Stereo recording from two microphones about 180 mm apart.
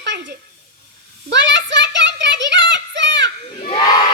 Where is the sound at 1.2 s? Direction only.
80° right.